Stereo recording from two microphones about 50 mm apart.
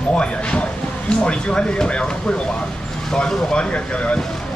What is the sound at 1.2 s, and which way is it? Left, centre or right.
Speech, left.